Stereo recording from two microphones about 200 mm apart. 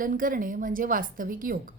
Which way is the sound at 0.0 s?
45° right (ahead or behind).